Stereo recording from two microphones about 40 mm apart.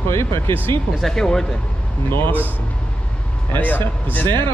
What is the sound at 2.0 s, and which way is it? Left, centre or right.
Speech, left.